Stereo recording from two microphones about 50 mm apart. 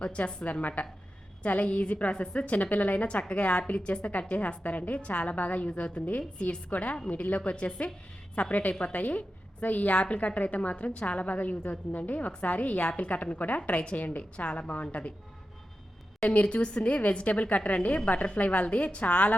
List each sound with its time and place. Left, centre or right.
0.0 s a woman's voice: left
0.4 s a woman's voice: left
16.3 s a woman's voice: left